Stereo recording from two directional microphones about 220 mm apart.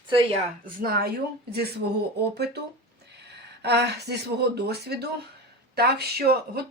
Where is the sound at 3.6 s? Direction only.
50° right (ahead or behind).